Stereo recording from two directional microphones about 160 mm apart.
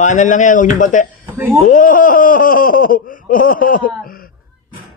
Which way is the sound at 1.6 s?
55° left (ahead or behind).